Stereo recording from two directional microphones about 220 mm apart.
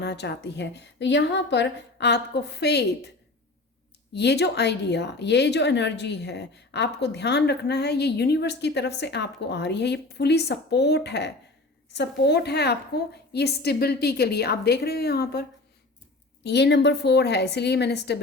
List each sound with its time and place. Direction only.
0.0 s a woman's voice: 50° left (ahead or behind)
4.1 s a woman's voice: 50° left (ahead or behind)